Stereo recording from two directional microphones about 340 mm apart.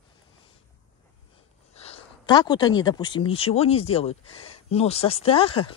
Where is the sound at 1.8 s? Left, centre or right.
Centre.